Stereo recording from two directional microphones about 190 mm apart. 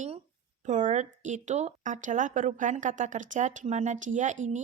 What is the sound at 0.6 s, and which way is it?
A woman's voice, 40° right (ahead or behind).